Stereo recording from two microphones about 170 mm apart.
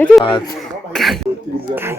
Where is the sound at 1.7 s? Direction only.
15° right (ahead or behind).